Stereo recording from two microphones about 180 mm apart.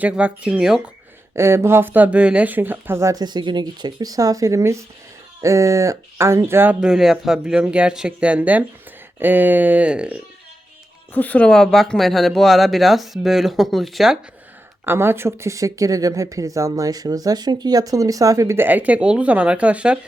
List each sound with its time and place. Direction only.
0.0 s speech: 5° right (ahead or behind)
11.1 s speech: 10° left (ahead or behind)
14.8 s speech: 15° right (ahead or behind)